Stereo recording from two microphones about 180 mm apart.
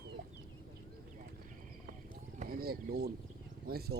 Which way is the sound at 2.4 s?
55° right (ahead or behind).